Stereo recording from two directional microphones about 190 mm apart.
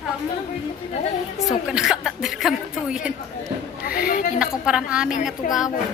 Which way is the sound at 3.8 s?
50° left (ahead or behind).